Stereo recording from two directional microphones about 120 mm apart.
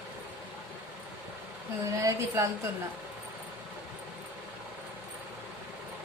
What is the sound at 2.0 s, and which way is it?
Speech, 25° right (ahead or behind).